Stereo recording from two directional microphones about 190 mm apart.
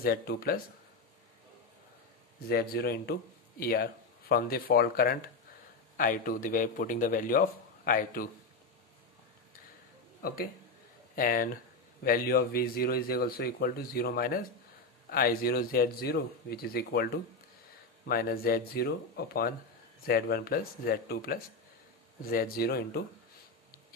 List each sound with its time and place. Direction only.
0.0 s a man's voice: 55° left (ahead or behind)
2.4 s a man's voice: 55° left (ahead or behind)
10.2 s a man's voice: 50° left (ahead or behind)